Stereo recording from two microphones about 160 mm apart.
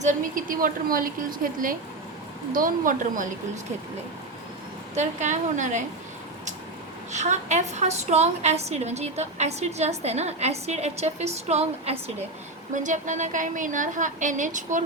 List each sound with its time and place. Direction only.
0.0 s a woman's voice: 55° right (ahead or behind)
4.9 s a woman's voice: 50° right (ahead or behind)
7.1 s a woman's voice: 45° right (ahead or behind)
12.7 s a woman's voice: 50° right (ahead or behind)